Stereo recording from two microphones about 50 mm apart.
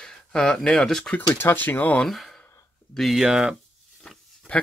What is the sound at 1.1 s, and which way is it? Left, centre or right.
Speech, left.